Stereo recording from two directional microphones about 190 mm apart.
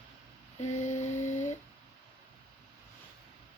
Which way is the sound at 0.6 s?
40° left (ahead or behind).